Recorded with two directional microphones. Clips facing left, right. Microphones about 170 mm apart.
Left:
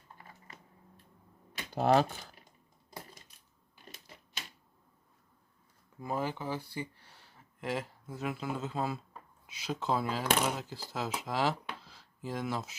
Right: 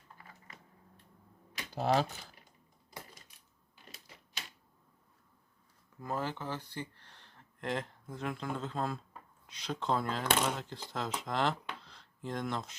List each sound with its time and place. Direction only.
1.7 s speech: 50° left (ahead or behind)
6.0 s speech: 10° left (ahead or behind)